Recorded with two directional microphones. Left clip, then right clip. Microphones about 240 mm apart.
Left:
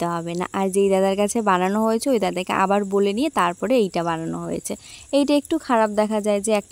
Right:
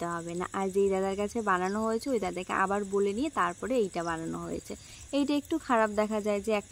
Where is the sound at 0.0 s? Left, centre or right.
Left.